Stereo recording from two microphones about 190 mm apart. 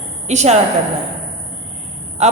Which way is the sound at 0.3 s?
35° right (ahead or behind).